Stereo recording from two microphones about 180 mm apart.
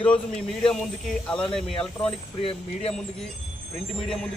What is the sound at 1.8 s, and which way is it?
Speech, 5° left (ahead or behind).